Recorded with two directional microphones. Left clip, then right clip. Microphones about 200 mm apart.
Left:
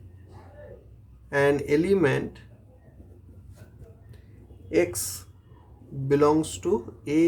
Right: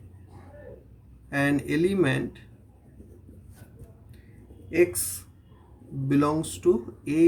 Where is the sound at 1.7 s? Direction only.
35° left (ahead or behind).